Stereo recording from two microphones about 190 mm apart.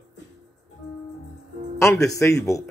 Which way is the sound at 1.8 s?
15° left (ahead or behind).